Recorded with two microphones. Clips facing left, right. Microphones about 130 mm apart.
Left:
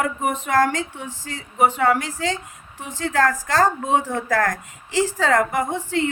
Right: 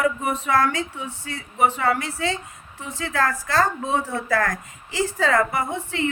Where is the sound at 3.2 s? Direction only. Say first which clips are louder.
Left 3 dB; 40° left (ahead or behind).